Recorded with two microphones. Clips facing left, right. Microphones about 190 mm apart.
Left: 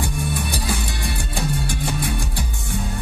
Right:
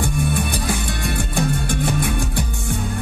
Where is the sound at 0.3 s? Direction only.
55° right (ahead or behind).